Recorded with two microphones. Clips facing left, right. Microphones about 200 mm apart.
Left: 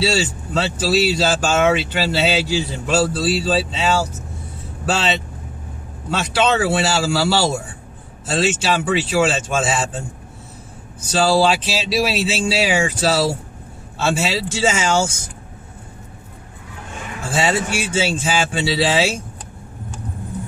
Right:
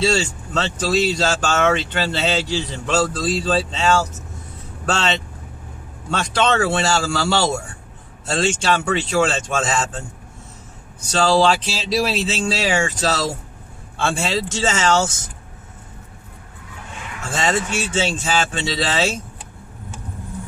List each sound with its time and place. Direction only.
0.0 s speech: 5° left (ahead or behind)
11.1 s speech: 10° left (ahead or behind)
17.3 s speech: 10° left (ahead or behind)